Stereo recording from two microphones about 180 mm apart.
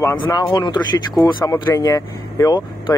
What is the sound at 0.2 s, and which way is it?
Speech, 25° left (ahead or behind).